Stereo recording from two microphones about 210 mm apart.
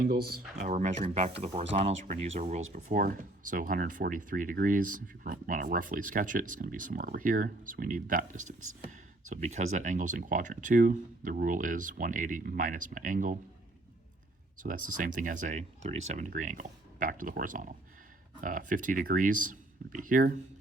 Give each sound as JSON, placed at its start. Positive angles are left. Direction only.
{"t": 0.0, "sound": "speech", "side_deg": -45}
{"t": 14.6, "sound": "speech", "side_deg": -40}